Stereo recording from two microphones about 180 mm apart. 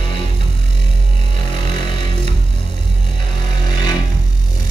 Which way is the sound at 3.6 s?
25° left (ahead or behind).